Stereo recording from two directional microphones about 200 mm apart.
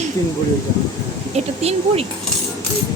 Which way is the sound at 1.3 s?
30° right (ahead or behind).